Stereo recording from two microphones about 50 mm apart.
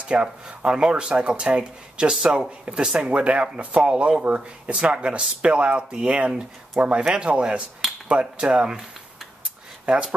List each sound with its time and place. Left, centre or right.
0.1 s speech: right